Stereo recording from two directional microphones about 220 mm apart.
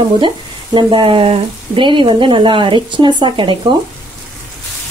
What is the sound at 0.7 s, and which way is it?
Speech, 20° right (ahead or behind).